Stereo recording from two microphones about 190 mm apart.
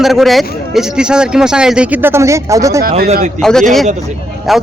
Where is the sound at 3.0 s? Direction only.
40° right (ahead or behind).